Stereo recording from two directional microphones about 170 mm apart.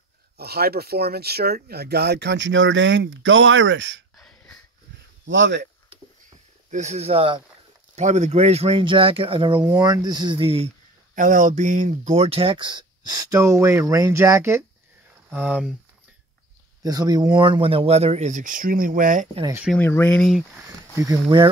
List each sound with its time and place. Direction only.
0.4 s speech: 70° right (ahead or behind); by 4.0 s 90° right
4.2 s wheeze: 5° left (ahead or behind)
5.2 s speech: 90° right
6.7 s speech: 45° right (ahead or behind)
7.9 s speech: 40° right (ahead or behind)
11.1 s speech: 50° right (ahead or behind); by 15.7 s 5° right (ahead or behind)
16.8 s speech: 20° right (ahead or behind); by 19.2 s 50° right (ahead or behind)
19.8 s speech: 15° left (ahead or behind)
20.9 s speech: 20° right (ahead or behind)